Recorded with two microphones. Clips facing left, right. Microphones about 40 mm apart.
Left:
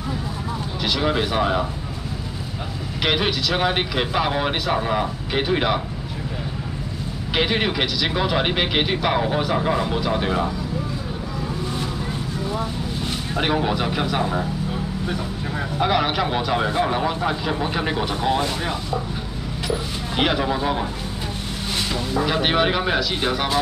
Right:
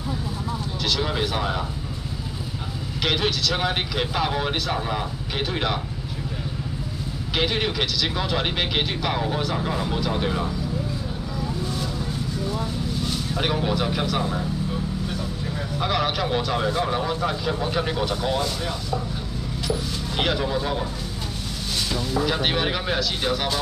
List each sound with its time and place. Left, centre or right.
0.8 s speech: centre
3.0 s speech: centre
7.3 s speech: centre
12.5 s vehicle: left
13.4 s speech: centre
15.8 s a man's voice: centre
20.2 s speech: centre
22.1 s speech: centre